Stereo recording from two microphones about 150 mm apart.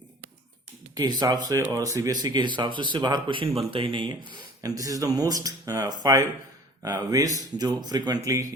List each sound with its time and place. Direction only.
0.9 s speech: 30° right (ahead or behind)
4.6 s speech: 25° right (ahead or behind)